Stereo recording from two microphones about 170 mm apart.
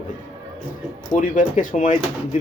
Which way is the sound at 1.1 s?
50° left (ahead or behind).